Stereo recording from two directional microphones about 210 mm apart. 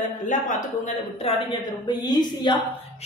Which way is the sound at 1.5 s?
20° left (ahead or behind).